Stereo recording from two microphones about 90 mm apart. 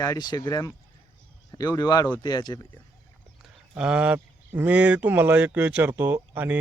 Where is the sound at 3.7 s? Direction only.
10° right (ahead or behind).